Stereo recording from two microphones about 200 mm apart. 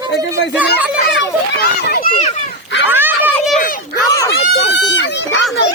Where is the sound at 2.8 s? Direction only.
10° right (ahead or behind).